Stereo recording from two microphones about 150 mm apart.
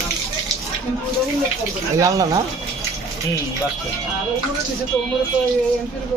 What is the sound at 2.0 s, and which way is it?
Speech, 20° right (ahead or behind).